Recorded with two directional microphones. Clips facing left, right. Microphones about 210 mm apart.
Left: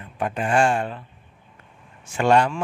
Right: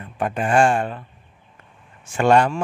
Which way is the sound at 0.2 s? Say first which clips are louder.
Right 3 dB; 50° right (ahead or behind).